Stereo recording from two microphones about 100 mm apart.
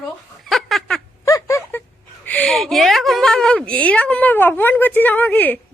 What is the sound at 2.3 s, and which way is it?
Speech, 15° left (ahead or behind).